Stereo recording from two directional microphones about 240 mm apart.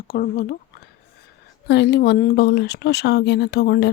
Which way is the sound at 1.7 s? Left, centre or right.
Left.